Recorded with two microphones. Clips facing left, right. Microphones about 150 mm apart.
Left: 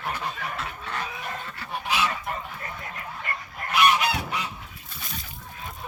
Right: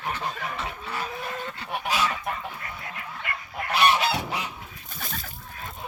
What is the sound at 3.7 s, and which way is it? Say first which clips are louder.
Goose: even; 30° right (ahead or behind).